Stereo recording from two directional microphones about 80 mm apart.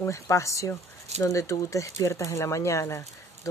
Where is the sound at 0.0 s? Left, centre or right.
Left.